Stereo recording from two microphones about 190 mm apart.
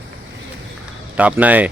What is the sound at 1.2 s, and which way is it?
Speech, 5° right (ahead or behind).